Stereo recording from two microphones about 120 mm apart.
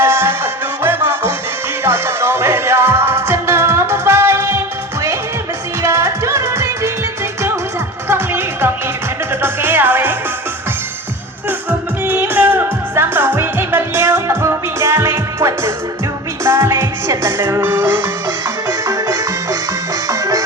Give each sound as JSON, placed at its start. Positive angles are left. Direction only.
{"t": 0.0, "sound": "music", "side_deg": -20}
{"t": 5.8, "sound": "music", "side_deg": -20}
{"t": 8.0, "sound": "music", "side_deg": -20}
{"t": 12.0, "sound": "music", "side_deg": -15}